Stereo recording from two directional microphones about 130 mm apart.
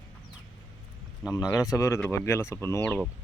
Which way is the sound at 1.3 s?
30° left (ahead or behind).